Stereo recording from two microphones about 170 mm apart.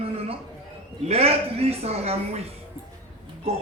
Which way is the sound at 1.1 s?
35° right (ahead or behind).